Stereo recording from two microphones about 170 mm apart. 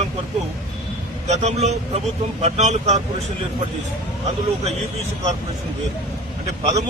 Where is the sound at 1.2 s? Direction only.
40° right (ahead or behind).